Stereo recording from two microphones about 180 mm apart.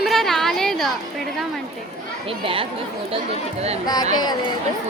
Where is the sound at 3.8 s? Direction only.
20° left (ahead or behind).